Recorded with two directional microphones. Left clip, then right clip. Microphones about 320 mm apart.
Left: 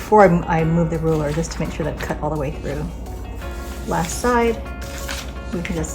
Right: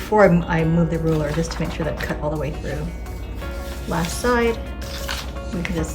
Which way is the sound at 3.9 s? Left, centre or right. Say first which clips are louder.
Left 2 dB; centre.